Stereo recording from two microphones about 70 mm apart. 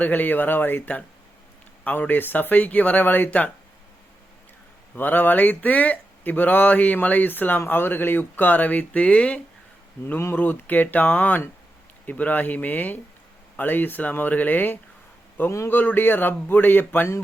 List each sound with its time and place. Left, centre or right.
0.0 s speech: left
4.9 s speech: left
15.4 s a man's voice: left
15.7 s speech: left